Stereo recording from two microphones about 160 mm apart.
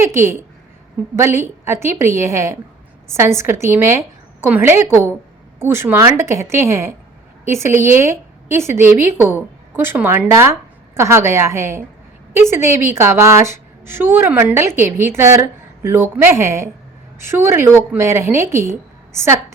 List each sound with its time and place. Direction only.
0.0 s a woman's voice: 15° right (ahead or behind)